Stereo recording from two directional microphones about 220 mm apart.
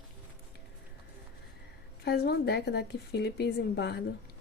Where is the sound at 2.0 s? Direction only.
50° left (ahead or behind).